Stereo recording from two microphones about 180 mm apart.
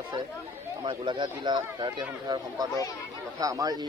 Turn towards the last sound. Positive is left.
turn(degrees=-20)  # may be behind; listen again after turning